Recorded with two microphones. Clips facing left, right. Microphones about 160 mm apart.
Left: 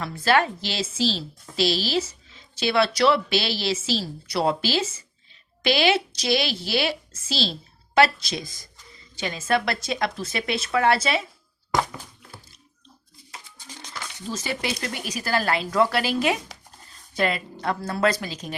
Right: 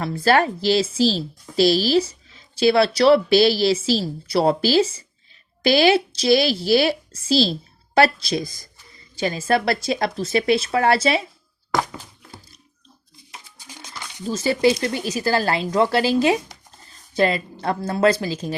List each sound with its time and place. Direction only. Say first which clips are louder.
0.0 s speech: right 3 dB; 40° right (ahead or behind)
13.7 s a sound: even; 10° right (ahead or behind)
14.3 s speech: right 11 dB; 35° right (ahead or behind)